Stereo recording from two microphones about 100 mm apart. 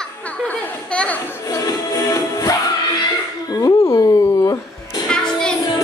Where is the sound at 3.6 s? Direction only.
35° left (ahead or behind).